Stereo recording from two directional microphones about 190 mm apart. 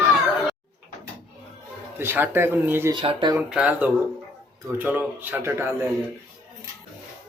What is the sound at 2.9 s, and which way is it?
Speech, 25° right (ahead or behind).